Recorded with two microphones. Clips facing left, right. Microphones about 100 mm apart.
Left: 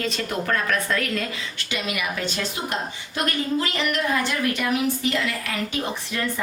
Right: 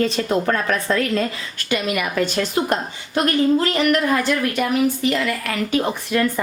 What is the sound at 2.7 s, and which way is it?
A woman's voice, 45° right (ahead or behind).